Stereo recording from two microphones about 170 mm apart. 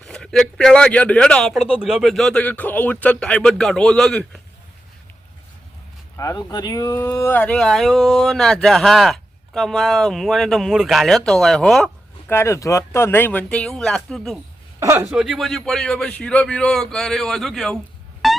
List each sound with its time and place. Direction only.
0.0 s speech: 5° left (ahead or behind)
6.1 s speech: 20° left (ahead or behind); by 11.9 s centre (ahead or behind)
12.3 s speech: 15° left (ahead or behind)
14.8 s speech: 15° right (ahead or behind)
15.1 s speech: centre (ahead or behind)
18.2 s music: centre (ahead or behind)